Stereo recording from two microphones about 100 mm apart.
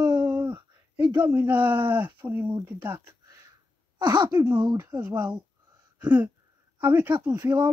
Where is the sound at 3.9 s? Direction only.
50° right (ahead or behind).